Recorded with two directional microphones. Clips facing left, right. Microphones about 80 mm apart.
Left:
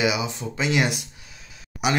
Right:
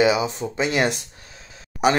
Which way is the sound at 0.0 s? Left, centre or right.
Right.